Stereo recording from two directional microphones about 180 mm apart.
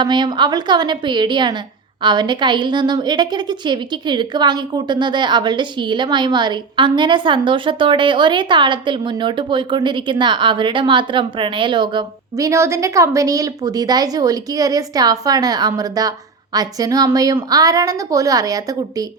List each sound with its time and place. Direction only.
0.0 s a woman's voice: 25° right (ahead or behind)